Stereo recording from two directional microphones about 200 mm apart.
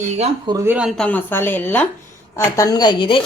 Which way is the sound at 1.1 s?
10° left (ahead or behind).